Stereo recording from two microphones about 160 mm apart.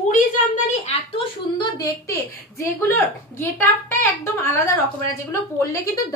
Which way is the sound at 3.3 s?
15° left (ahead or behind).